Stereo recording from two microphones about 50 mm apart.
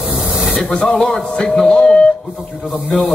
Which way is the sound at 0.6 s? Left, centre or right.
Centre.